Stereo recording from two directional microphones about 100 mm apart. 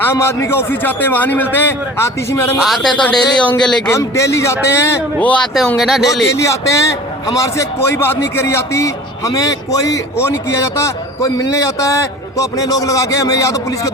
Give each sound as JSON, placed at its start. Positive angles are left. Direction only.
{"t": 0.0, "sound": "a man's voice", "side_deg": 25}
{"t": 2.6, "sound": "speech", "side_deg": 0}
{"t": 2.9, "sound": "speech", "side_deg": 10}
{"t": 3.8, "sound": "a man's voice", "side_deg": 30}
{"t": 5.2, "sound": "speech", "side_deg": 15}
{"t": 5.5, "sound": "speech", "side_deg": 0}
{"t": 6.3, "sound": "a man's voice", "side_deg": 30}